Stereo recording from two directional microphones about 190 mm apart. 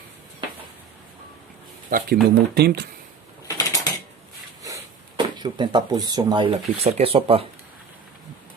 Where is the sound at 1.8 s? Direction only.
50° right (ahead or behind).